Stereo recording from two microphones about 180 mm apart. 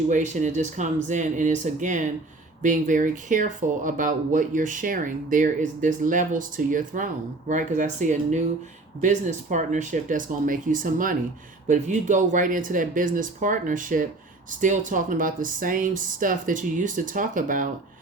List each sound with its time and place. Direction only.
0.1 s speech: 45° right (ahead or behind)